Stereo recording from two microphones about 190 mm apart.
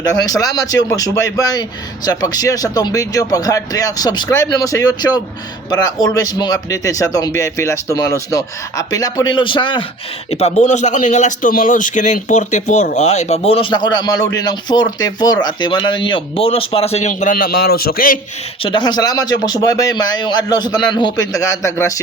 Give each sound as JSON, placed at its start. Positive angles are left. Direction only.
{"t": 0.0, "sound": "a man's voice", "side_deg": 20}
{"t": 18.6, "sound": "speech", "side_deg": 25}